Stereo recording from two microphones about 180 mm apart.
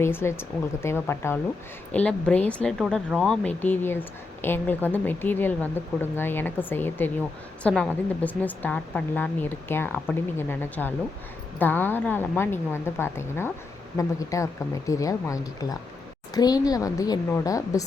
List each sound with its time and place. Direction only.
0.0 s a woman's voice: 15° left (ahead or behind)